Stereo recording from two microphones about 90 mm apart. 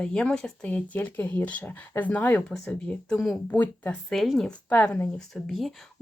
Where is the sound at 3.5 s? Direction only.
20° left (ahead or behind).